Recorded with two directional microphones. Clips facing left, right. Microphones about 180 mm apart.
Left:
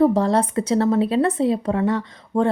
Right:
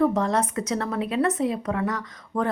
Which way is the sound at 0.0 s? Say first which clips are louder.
Left 5 dB; 30° left (ahead or behind).